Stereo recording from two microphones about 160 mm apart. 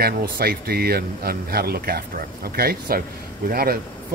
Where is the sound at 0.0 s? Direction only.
70° right (ahead or behind).